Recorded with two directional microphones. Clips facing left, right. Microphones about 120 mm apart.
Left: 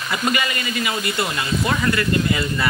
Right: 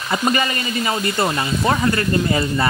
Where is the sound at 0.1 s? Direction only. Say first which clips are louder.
Right 3 dB; 35° right (ahead or behind).